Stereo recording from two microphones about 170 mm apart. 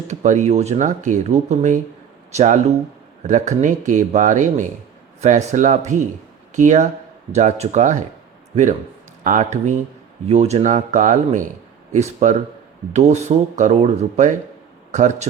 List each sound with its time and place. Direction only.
0.1 s speech: 45° right (ahead or behind)